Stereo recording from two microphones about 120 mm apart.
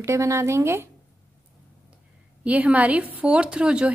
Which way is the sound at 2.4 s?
10° right (ahead or behind).